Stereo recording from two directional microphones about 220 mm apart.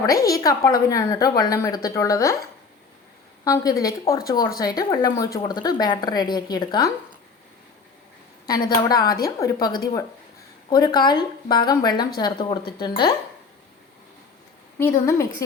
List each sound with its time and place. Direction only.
0.0 s speech: 15° left (ahead or behind)
3.4 s speech: 15° left (ahead or behind)
8.4 s a woman's voice: 15° left (ahead or behind)
14.8 s speech: 10° left (ahead or behind)